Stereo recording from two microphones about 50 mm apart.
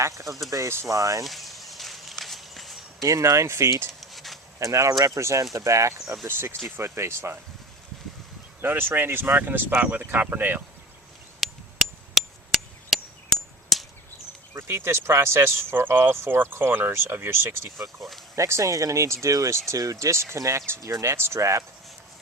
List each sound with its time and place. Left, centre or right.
0.0 s speech: right
0.3 s speech: centre
0.5 s speech: right
1.2 s walk: centre
3.1 s speech: right
4.0 s a sound: centre
4.6 s speech: right
6.2 s speech: right
8.6 s speech: right
11.3 s a sound: centre
14.5 s speech: right
17.8 s speech: centre
18.3 s speech: right